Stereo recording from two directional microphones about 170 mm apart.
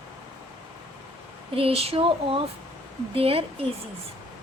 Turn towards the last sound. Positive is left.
turn(degrees=-35)  # may be behind; listen again after turning